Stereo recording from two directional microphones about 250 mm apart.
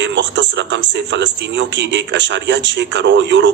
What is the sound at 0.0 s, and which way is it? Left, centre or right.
A man's voice, right.